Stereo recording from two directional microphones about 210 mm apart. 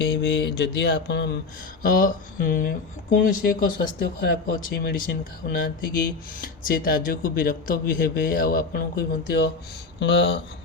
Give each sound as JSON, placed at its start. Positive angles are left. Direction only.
{"t": 0.0, "sound": "speech", "side_deg": 50}